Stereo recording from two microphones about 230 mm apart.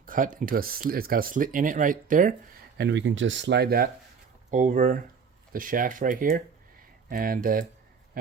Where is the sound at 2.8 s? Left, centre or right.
Right.